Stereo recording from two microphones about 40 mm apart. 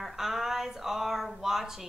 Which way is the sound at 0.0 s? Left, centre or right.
Centre.